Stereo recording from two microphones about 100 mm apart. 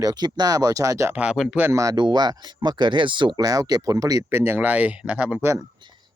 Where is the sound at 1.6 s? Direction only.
30° right (ahead or behind).